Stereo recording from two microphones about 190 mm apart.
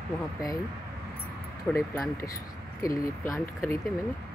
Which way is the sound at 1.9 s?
15° left (ahead or behind).